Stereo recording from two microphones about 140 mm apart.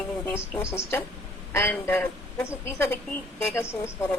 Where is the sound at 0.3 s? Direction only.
20° left (ahead or behind).